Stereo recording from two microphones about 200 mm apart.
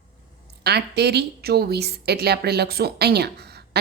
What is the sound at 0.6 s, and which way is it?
A woman's voice, 55° right (ahead or behind).